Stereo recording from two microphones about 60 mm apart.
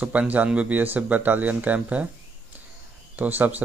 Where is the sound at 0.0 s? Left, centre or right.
Right.